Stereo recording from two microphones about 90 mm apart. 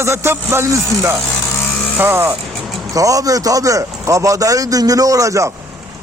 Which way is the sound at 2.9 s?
40° right (ahead or behind).